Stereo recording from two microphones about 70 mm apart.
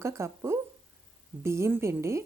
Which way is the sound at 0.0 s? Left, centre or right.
Right.